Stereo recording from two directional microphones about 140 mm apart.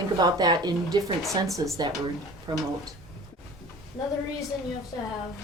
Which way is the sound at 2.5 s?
35° right (ahead or behind).